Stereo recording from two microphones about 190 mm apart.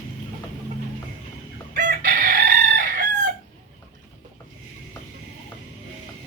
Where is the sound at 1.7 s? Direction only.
45° right (ahead or behind).